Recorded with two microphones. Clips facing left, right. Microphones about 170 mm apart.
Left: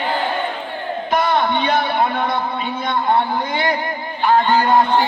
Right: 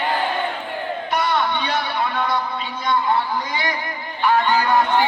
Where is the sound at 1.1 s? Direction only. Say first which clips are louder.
Left 4 dB; 50° left (ahead or behind).